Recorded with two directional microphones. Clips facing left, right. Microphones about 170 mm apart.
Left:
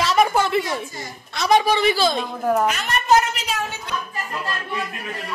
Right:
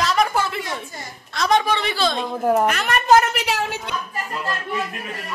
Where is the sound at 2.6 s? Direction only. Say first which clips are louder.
Right 2 dB; 60° right (ahead or behind); by 3.9 s 75° right (ahead or behind).